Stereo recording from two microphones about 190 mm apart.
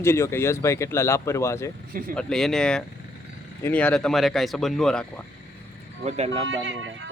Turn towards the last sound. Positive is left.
turn(degrees=-80)